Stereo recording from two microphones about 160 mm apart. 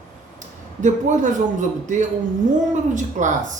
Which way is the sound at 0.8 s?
50° right (ahead or behind).